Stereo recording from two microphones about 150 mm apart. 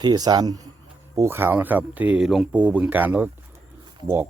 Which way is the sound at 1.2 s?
15° right (ahead or behind).